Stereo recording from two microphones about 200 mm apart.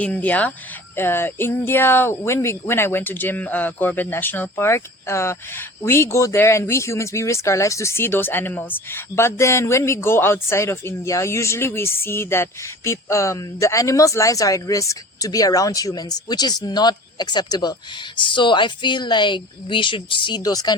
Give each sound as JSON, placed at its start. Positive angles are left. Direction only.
{"t": 0.0, "sound": "a woman's voice", "side_deg": 5}